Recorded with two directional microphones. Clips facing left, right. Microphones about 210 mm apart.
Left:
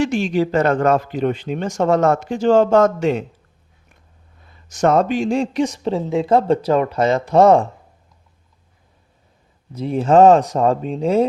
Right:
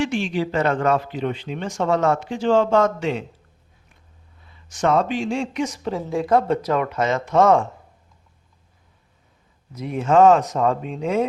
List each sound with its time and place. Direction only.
0.0 s speech: 40° left (ahead or behind)
4.4 s a woman's voice: 45° left (ahead or behind)
9.7 s a woman's voice: 30° left (ahead or behind)